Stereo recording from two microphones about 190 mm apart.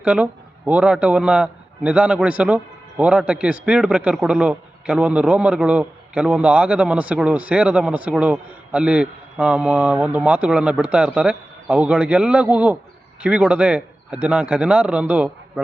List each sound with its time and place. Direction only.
0.0 s a man's voice: 5° right (ahead or behind)